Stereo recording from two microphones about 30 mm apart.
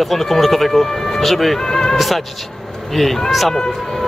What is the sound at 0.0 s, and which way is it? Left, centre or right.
Speech, centre.